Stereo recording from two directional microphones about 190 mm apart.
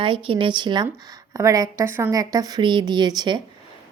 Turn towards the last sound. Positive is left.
turn(degrees=-20)  # may be behind; listen again after turning